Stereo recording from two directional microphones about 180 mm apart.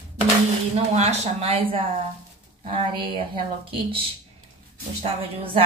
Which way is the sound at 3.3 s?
30° right (ahead or behind).